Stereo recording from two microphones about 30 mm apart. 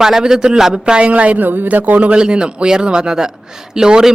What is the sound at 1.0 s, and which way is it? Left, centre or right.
Speech, right.